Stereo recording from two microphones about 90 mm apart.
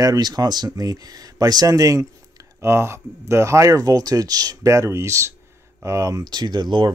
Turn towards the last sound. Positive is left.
turn(degrees=-55)  # may be behind; listen again after turning